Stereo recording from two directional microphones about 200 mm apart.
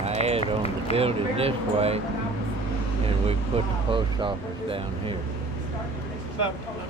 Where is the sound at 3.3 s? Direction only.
25° right (ahead or behind).